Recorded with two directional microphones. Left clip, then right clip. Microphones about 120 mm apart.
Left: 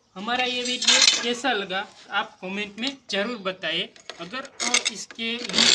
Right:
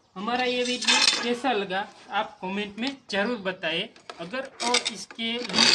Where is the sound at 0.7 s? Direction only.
60° left (ahead or behind).